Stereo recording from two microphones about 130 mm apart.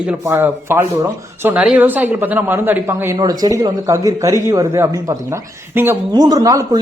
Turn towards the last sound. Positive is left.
turn(degrees=-30)  # may be behind; listen again after turning